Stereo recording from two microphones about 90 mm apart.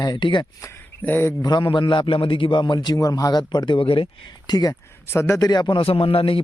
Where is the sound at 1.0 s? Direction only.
20° left (ahead or behind).